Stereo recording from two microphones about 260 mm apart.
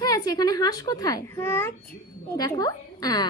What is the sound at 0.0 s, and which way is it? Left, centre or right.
A woman's voice, centre.